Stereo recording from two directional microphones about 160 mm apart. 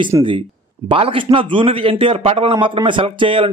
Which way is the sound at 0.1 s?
25° right (ahead or behind).